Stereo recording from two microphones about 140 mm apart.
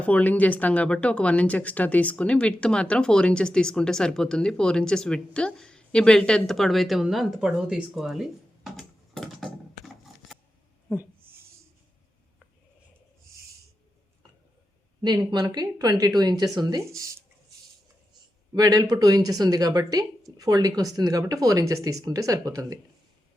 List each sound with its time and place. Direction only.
0.0 s speech: 10° left (ahead or behind)
15.0 s a woman's voice: 30° right (ahead or behind)
18.5 s a woman's voice: 25° right (ahead or behind)